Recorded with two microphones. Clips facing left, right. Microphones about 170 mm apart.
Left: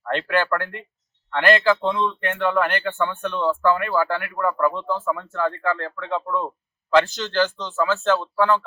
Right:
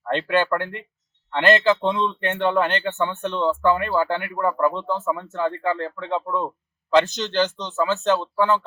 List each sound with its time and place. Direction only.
0.0 s speech: 20° right (ahead or behind)